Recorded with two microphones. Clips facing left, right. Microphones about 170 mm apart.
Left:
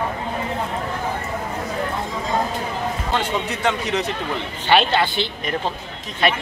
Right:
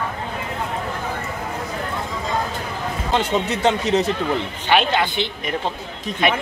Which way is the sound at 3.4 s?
25° right (ahead or behind).